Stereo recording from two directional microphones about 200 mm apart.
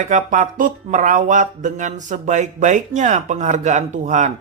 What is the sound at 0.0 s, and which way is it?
Speech, 40° right (ahead or behind).